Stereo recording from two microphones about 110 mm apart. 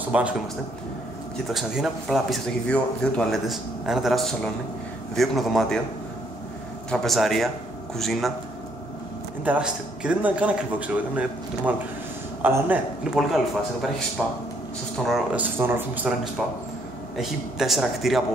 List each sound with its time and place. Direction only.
0.1 s a man's voice: 10° right (ahead or behind)
1.5 s a man's voice: 5° right (ahead or behind)
6.9 s a man's voice: 5° left (ahead or behind)
9.4 s a man's voice: 10° right (ahead or behind)
15.3 s a man's voice: 20° right (ahead or behind)
17.2 s a man's voice: centre (ahead or behind)